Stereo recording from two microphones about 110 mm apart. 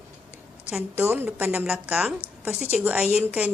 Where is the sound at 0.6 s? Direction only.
10° right (ahead or behind).